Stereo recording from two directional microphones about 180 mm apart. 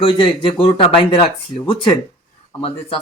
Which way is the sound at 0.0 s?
30° left (ahead or behind).